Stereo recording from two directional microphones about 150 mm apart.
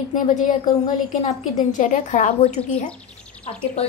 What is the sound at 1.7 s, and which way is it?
Speech, 55° left (ahead or behind).